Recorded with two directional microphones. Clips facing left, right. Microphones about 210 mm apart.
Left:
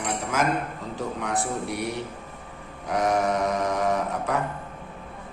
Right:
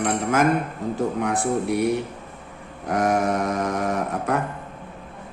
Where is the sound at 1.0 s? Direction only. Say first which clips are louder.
Right 4 dB; 50° right (ahead or behind).